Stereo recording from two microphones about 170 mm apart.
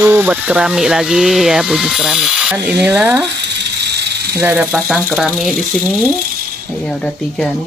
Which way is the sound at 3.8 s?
80° right.